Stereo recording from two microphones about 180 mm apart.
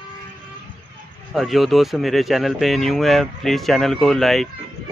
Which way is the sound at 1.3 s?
Centre (ahead or behind).